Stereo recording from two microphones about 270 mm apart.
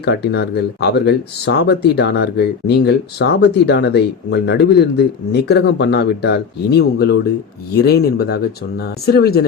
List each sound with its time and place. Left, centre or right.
0.0 s speech: left